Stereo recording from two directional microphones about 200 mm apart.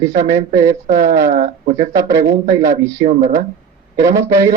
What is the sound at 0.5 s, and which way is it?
Speech, 15° right (ahead or behind).